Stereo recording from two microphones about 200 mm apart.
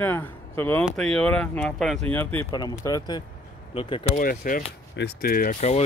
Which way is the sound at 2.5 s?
20° left (ahead or behind).